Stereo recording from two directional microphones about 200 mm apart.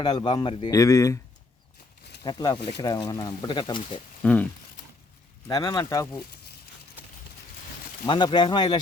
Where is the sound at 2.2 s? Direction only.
20° left (ahead or behind).